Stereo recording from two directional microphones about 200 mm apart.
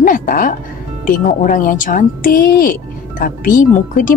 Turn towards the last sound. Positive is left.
turn(degrees=40)  # may be behind; listen again after turning